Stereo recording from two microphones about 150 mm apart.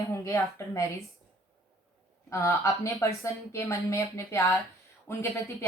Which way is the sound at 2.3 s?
20° left (ahead or behind).